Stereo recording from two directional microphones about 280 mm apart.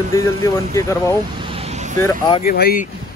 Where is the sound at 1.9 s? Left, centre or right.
Centre.